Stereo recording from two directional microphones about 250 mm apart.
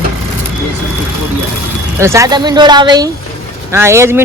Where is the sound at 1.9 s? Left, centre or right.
Centre.